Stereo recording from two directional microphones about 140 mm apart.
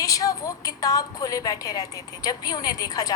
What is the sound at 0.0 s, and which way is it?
A woman's voice, 25° left (ahead or behind).